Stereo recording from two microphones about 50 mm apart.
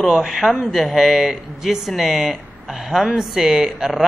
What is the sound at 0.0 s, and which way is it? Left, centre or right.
Speech, centre.